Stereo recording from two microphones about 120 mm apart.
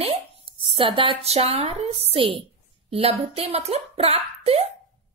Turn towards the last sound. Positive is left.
turn(degrees=-55)  # may be behind; listen again after turning